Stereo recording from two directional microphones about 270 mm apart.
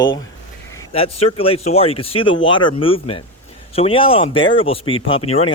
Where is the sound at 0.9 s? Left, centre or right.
Left.